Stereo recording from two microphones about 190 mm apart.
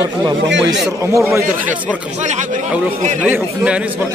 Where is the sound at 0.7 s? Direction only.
15° right (ahead or behind).